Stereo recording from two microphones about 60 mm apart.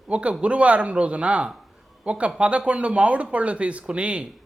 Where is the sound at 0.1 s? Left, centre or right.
Right.